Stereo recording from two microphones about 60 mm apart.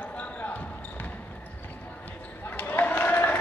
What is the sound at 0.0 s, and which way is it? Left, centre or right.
Basketball bounce, left.